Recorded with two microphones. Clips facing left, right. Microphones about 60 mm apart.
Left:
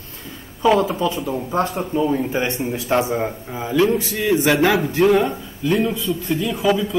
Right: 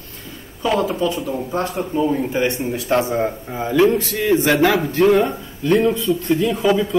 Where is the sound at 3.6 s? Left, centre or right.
Right.